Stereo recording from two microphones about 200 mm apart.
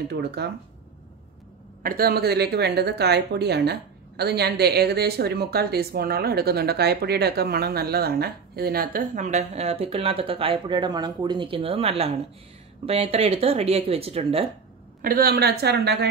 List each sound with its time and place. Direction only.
0.1 s speech: 55° right (ahead or behind)
1.8 s speech: 45° right (ahead or behind); by 14.5 s 30° right (ahead or behind)
15.0 s speech: 45° right (ahead or behind)